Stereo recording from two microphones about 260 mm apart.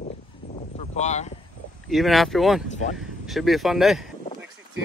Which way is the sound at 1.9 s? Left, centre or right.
Centre.